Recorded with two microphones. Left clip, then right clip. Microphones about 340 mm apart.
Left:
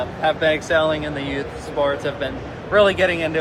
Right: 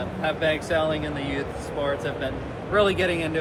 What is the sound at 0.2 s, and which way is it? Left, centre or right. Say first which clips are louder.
Speech: left 6 dB; left.